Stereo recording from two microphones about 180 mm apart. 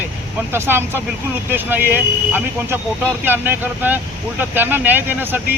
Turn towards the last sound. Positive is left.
turn(degrees=-10)  # may be behind; listen again after turning